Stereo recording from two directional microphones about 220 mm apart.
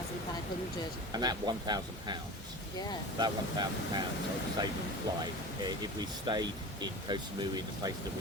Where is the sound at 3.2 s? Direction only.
20° right (ahead or behind).